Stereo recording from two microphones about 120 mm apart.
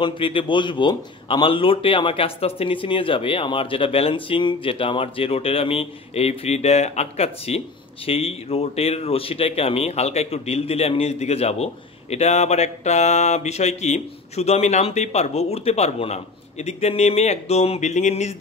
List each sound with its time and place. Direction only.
0.0 s a man's voice: 45° left (ahead or behind); by 18.3 s 70° left (ahead or behind)